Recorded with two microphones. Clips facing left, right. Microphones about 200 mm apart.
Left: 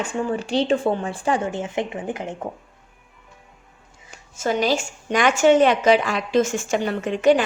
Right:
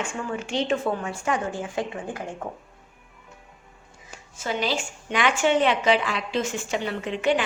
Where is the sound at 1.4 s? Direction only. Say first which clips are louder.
Left 3 dB; 20° left (ahead or behind).